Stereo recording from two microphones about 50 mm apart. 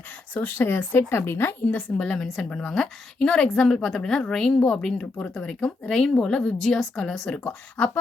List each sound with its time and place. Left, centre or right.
0.3 s speech: left
0.9 s a woman's voice: left
1.7 s a woman's voice: left
2.2 s a woman's voice: centre
7.3 s a woman's voice: centre